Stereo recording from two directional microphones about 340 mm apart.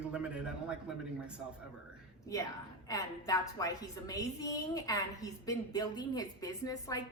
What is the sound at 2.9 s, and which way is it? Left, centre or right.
A woman's voice, centre.